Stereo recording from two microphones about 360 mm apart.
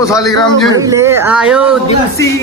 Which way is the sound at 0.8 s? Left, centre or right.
Centre.